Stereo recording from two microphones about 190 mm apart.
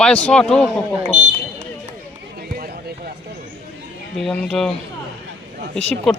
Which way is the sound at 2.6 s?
50° right (ahead or behind).